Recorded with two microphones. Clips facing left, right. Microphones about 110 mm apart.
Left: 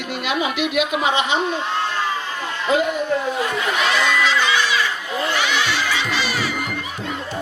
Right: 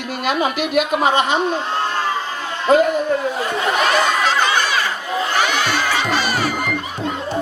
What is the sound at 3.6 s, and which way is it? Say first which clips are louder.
Crowd: right 6 dB; 45° right (ahead or behind).